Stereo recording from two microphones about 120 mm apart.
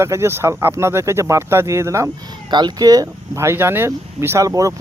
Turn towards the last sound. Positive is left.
turn(degrees=-25)  # may be behind; listen again after turning